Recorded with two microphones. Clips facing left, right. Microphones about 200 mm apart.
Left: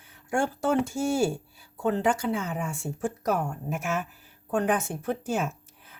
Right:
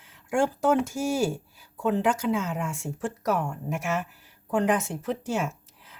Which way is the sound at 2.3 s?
90° right.